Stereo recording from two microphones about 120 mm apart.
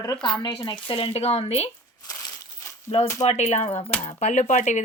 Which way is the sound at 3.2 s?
70° left (ahead or behind).